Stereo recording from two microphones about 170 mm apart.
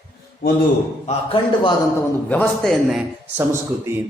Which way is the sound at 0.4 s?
60° left (ahead or behind).